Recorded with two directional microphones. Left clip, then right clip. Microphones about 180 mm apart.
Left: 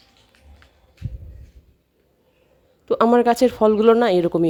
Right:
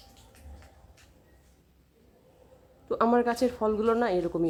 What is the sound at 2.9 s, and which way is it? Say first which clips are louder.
A woman's voice: left 9 dB; 45° left (ahead or behind).